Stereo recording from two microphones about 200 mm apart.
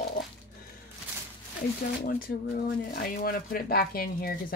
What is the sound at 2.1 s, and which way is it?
Speech, 50° left (ahead or behind).